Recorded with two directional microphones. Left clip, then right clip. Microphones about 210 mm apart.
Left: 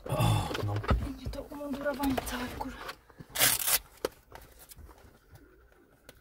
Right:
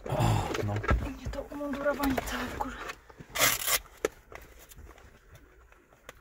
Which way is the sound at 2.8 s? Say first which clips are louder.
Right 2 dB; 10° left (ahead or behind).